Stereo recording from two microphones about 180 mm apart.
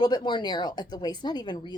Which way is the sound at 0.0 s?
25° left (ahead or behind).